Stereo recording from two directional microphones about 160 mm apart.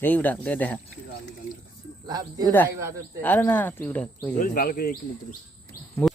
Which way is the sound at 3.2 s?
10° left (ahead or behind).